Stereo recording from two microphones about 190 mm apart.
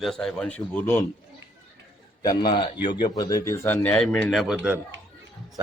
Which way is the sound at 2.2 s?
25° left (ahead or behind).